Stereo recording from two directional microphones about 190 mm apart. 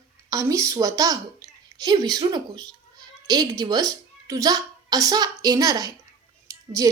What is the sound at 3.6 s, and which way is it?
A woman's voice, 20° right (ahead or behind).